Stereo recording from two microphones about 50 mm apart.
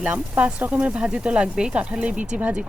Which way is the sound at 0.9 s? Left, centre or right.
Centre.